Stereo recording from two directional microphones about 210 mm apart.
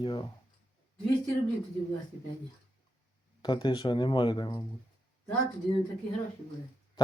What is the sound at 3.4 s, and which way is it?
Speech, 20° left (ahead or behind).